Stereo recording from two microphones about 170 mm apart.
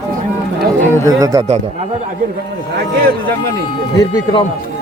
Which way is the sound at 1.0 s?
20° right (ahead or behind).